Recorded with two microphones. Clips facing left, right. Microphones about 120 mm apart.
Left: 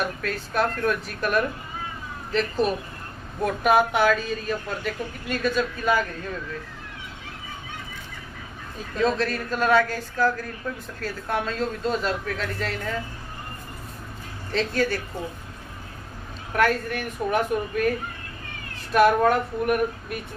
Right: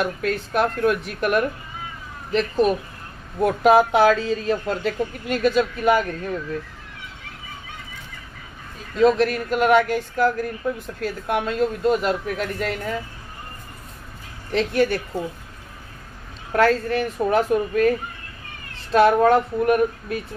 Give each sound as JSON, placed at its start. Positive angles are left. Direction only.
{"t": 0.2, "sound": "a woman's voice", "side_deg": -20}
{"t": 8.9, "sound": "speech", "side_deg": -15}
{"t": 14.5, "sound": "speech", "side_deg": -15}
{"t": 16.5, "sound": "speech", "side_deg": -30}
{"t": 18.9, "sound": "a woman's voice", "side_deg": -25}